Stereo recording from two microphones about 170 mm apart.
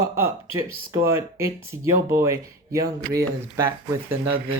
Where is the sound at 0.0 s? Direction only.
15° right (ahead or behind).